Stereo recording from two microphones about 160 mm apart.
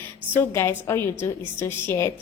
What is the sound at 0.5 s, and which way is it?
A woman's voice, 15° left (ahead or behind).